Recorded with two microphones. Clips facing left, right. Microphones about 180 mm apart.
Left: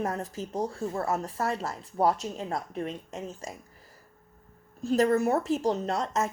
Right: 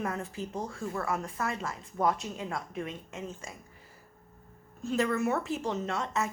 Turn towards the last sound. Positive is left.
turn(degrees=40)  # may be behind; listen again after turning